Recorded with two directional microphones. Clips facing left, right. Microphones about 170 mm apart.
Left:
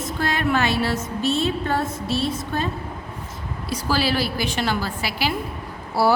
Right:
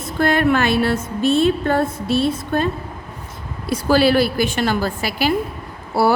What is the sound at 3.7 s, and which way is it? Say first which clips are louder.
A woman's voice: right 8 dB; 55° right (ahead or behind).